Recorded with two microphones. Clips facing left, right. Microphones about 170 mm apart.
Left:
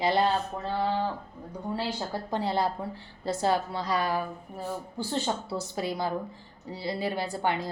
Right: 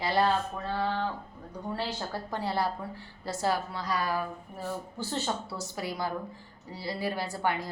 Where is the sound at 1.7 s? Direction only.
20° left (ahead or behind).